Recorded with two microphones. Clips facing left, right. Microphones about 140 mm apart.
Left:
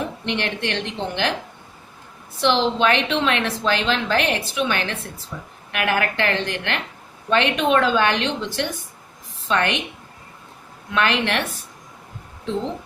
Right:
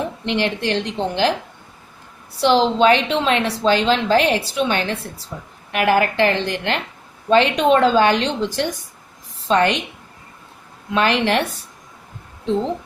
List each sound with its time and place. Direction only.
0.3 s a woman's voice: 30° right (ahead or behind)
2.4 s a woman's voice: 35° right (ahead or behind)
10.9 s a woman's voice: 30° right (ahead or behind)